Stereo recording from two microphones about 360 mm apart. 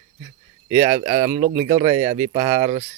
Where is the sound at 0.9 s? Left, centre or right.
Centre.